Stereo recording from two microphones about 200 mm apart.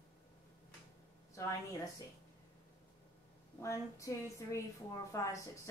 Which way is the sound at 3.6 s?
15° left (ahead or behind).